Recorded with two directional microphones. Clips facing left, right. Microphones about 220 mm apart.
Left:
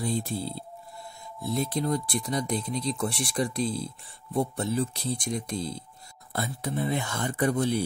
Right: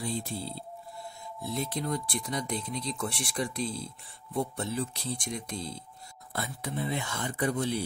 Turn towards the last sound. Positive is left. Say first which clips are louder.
# left 4 dB
turn(degrees=45)  # may be behind; listen again after turning